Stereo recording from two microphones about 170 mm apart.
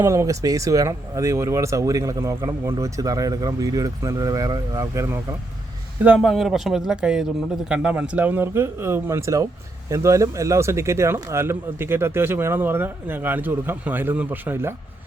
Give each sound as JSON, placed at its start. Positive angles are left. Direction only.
{"t": 0.0, "sound": "speech", "side_deg": -15}
{"t": 6.0, "sound": "speech", "side_deg": -5}